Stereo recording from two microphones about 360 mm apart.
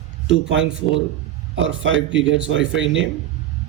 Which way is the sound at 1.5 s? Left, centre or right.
Right.